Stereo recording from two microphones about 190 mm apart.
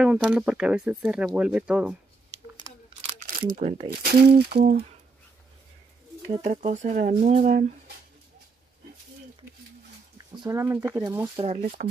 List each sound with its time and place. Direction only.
0.0 s speech: 5° right (ahead or behind)
3.2 s a sound: 45° right (ahead or behind)
3.8 s speech: 55° right (ahead or behind)
6.2 s speech: 35° right (ahead or behind)
10.1 s speech: 20° right (ahead or behind)
11.3 s speech: 35° right (ahead or behind)